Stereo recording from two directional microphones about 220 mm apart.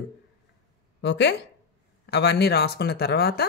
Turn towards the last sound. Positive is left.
turn(degrees=45)  # may be behind; listen again after turning